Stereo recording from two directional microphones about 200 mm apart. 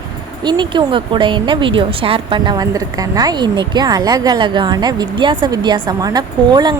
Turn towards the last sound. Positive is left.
turn(degrees=-20)  # may be behind; listen again after turning